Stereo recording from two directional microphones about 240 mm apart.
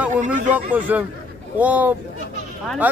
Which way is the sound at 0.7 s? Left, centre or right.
Centre.